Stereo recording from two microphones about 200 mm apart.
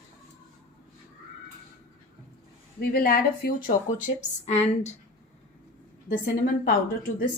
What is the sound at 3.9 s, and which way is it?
Speech, 35° left (ahead or behind).